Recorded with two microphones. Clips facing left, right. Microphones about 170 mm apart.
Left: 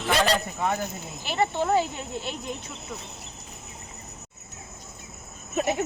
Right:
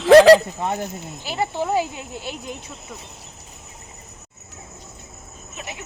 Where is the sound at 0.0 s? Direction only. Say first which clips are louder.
Right 15 dB; 90° right.